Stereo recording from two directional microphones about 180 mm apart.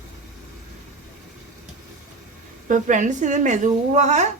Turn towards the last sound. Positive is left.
turn(degrees=-40)  # may be behind; listen again after turning